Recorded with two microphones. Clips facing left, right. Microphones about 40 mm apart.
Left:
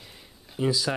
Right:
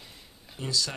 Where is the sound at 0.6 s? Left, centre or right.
Centre.